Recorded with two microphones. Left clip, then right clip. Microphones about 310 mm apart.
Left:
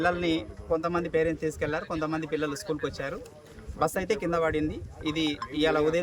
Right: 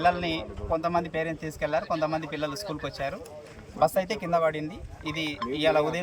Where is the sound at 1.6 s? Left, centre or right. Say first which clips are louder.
Right 3 dB; centre.